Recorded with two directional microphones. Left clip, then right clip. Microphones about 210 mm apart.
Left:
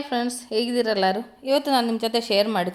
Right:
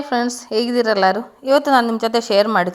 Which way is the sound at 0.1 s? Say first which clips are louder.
Right 6 dB; 20° right (ahead or behind).